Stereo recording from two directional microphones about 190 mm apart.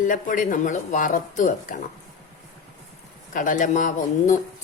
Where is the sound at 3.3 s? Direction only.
45° left (ahead or behind).